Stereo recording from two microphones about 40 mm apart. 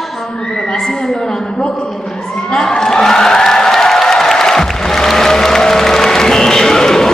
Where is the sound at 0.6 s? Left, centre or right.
Centre.